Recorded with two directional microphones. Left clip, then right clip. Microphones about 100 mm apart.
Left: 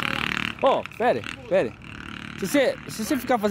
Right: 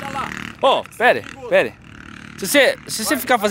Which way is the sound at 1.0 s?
25° right (ahead or behind).